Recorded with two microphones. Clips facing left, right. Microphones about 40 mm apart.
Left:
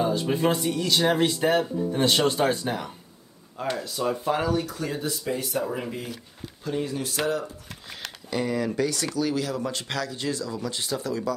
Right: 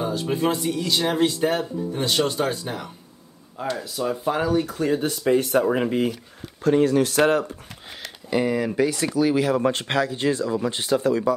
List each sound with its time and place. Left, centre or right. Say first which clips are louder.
0.0 s speech: even; centre
4.6 s speech: right 7 dB; right
6.6 s speech: right 11 dB; right
8.3 s speech: right 4 dB; centre
9.5 s speech: right 8 dB; right